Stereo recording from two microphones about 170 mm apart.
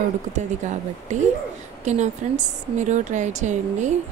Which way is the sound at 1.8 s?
45° right (ahead or behind).